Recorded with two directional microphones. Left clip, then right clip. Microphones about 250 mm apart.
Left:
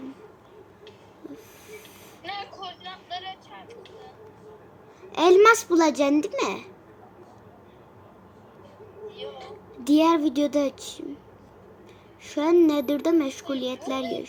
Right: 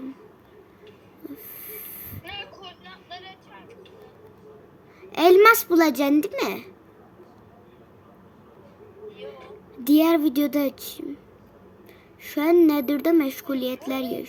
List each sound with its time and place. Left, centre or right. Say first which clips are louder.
1.3 s snort: even; right
5.1 s a child's voice: right 2 dB; right
9.1 s a sound: left 3 dB; centre
9.8 s a child's voice: right 1 dB; right
12.2 s a child's voice: right 2 dB; right